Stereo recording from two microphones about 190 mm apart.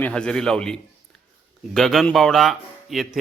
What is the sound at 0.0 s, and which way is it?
Speech, 5° left (ahead or behind).